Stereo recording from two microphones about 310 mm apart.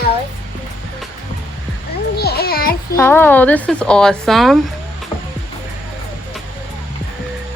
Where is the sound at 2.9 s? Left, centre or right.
Centre.